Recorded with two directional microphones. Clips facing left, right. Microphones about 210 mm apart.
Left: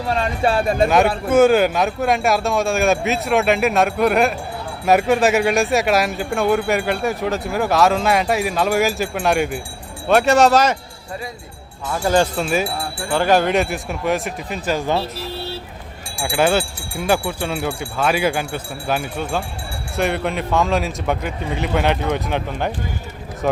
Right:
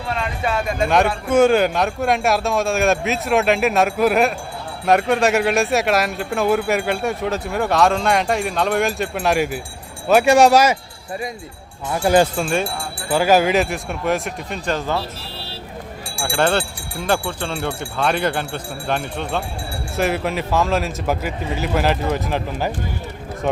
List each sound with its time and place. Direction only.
0.1 s speech: 30° left (ahead or behind)
1.3 s speech: 5° left (ahead or behind)
11.9 s speech: 15° right (ahead or behind)
12.4 s speech: centre (ahead or behind)
16.3 s speech: 5° left (ahead or behind)